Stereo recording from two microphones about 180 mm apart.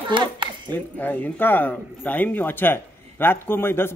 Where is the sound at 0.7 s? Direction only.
10° left (ahead or behind).